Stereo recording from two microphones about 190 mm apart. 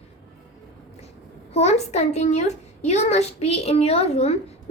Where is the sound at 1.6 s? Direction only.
35° left (ahead or behind).